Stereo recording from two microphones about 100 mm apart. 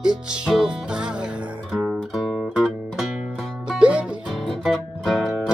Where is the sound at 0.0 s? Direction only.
5° right (ahead or behind).